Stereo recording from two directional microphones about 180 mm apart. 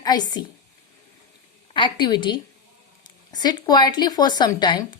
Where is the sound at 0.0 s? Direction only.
25° left (ahead or behind).